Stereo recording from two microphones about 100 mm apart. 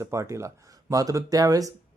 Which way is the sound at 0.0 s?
30° right (ahead or behind).